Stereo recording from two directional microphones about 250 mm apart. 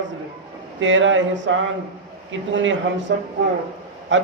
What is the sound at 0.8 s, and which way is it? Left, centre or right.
A man's voice, right.